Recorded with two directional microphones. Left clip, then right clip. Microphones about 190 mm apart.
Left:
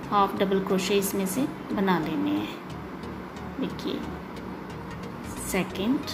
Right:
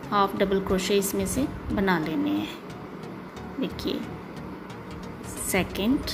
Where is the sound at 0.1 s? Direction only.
20° right (ahead or behind).